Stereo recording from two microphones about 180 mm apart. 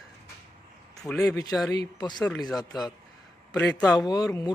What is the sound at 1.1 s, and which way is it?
A man's voice, 15° left (ahead or behind).